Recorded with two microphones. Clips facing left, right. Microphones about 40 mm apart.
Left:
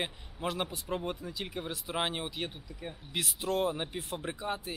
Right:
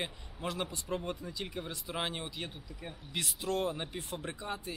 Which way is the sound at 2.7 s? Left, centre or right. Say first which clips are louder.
Left 2 dB; centre.